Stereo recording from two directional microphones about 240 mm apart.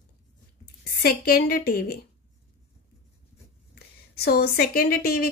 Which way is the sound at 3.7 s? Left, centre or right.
Left.